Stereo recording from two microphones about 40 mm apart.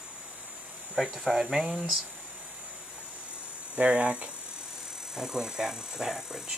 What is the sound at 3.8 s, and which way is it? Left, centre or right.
Speech, right.